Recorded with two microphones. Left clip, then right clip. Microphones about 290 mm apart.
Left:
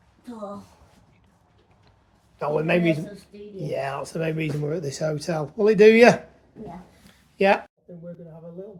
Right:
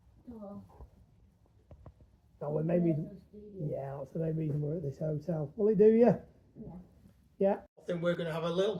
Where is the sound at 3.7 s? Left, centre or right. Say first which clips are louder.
Left 12 dB; centre.